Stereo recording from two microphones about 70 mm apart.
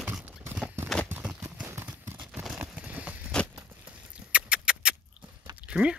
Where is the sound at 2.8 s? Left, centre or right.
Centre.